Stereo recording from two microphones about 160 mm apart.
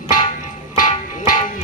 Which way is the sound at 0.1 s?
55° left (ahead or behind).